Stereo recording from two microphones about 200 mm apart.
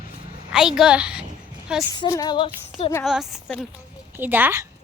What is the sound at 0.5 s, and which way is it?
Speech, centre (ahead or behind).